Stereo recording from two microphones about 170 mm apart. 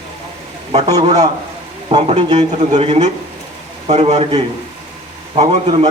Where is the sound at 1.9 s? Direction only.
35° right (ahead or behind).